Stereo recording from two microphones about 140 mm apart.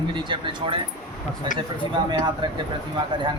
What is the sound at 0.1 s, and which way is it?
Mantra, 35° right (ahead or behind).